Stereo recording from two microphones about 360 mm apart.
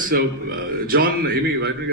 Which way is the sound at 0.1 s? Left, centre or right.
Right.